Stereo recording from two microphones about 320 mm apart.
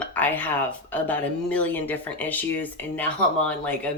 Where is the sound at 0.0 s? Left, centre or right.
Centre.